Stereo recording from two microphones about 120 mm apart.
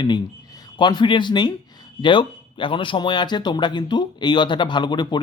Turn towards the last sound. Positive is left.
turn(degrees=35)  # may be behind; listen again after turning